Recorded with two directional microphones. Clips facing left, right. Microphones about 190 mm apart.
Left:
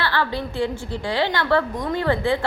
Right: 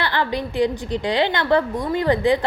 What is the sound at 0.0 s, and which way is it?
A woman's voice, 15° right (ahead or behind).